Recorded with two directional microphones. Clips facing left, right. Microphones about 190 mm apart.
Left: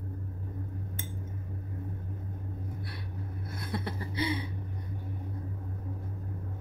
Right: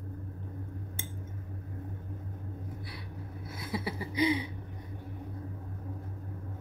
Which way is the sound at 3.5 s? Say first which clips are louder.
Right 1 dB; 5° right (ahead or behind).